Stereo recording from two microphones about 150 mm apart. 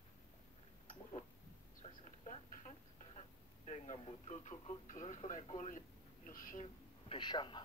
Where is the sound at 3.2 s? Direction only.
45° left (ahead or behind).